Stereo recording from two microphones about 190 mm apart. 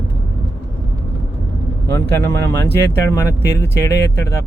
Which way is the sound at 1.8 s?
65° right (ahead or behind).